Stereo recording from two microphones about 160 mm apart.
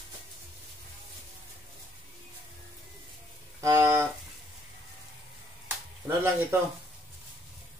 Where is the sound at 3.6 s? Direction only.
20° right (ahead or behind).